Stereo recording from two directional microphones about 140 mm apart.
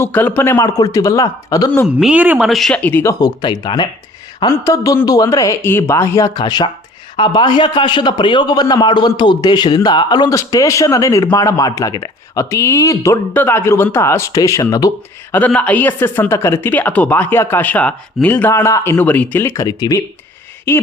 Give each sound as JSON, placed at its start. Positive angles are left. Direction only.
{"t": 0.0, "sound": "a man's voice", "side_deg": 15}
{"t": 2.0, "sound": "speech", "side_deg": -10}
{"t": 2.5, "sound": "a man's voice", "side_deg": 0}
{"t": 15.3, "sound": "speech", "side_deg": 10}
{"t": 19.6, "sound": "a man's voice", "side_deg": 25}